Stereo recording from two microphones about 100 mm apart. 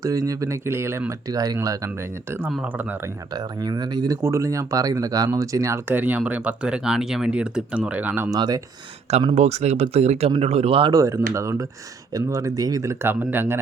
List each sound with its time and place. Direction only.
0.0 s speech: 35° right (ahead or behind)
1.3 s speech: 40° right (ahead or behind)
3.3 s speech: 45° right (ahead or behind)
4.2 s speech: 30° right (ahead or behind)
5.9 s speech: 15° right (ahead or behind)
8.3 s speech: 40° right (ahead or behind)
9.0 s speech: 90° right; by 10.9 s 65° right (ahead or behind)
10.9 s speech: 30° right (ahead or behind)